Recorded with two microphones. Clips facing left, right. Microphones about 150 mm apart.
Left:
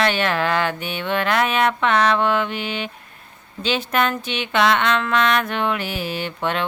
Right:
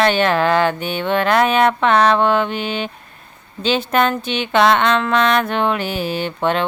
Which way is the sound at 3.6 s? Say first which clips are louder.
Right 4 dB; 30° right (ahead or behind).